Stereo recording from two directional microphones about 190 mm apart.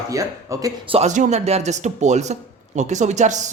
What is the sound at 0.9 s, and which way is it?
Speech, 40° right (ahead or behind).